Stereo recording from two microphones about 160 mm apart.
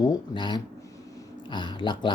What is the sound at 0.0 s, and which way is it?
Speech, 25° left (ahead or behind).